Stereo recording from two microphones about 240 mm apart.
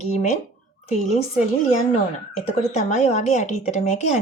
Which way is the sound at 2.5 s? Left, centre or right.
Left.